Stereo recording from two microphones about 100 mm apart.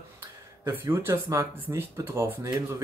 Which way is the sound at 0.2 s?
30° right (ahead or behind).